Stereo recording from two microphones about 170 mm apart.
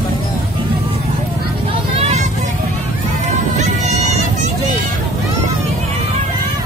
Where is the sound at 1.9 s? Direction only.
40° right (ahead or behind).